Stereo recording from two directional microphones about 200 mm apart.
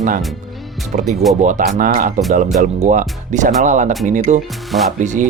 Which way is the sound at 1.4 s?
40° right (ahead or behind).